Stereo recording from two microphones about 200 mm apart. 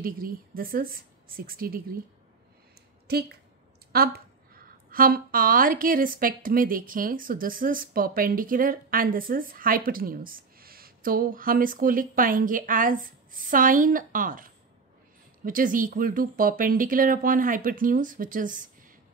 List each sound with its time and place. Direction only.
0.0 s a woman's voice: 45° right (ahead or behind)
3.1 s a woman's voice: 50° right (ahead or behind)